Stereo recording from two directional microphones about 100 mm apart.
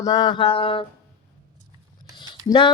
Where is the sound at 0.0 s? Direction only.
40° left (ahead or behind); by 0.9 s 65° left (ahead or behind).